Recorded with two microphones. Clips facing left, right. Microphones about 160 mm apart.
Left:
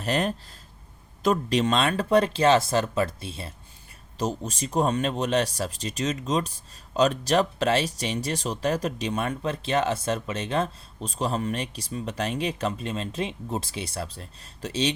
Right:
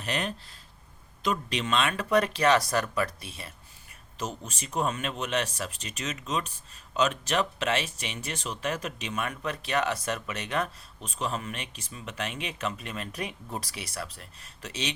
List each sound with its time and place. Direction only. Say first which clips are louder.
0.0 s speech: left 6 dB; 40° left (ahead or behind)